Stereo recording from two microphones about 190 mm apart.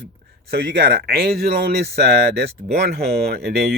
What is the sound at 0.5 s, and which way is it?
Speech, 55° right (ahead or behind).